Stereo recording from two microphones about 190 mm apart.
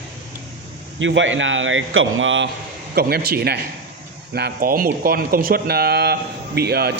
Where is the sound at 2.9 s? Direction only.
55° right (ahead or behind).